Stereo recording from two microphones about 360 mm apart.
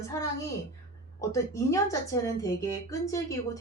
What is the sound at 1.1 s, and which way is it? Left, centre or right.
A woman's voice, centre.